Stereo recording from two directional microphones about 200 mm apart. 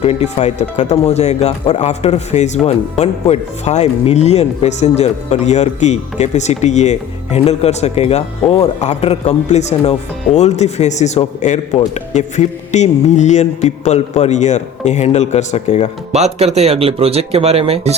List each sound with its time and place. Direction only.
0.0 s speech: 30° left (ahead or behind)
16.1 s speech: 35° right (ahead or behind)